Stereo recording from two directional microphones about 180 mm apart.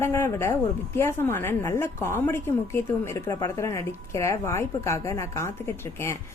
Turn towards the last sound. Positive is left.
turn(degrees=15)  # may be behind; listen again after turning